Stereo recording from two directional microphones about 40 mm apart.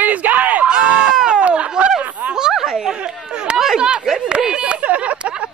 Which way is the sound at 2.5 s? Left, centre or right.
Centre.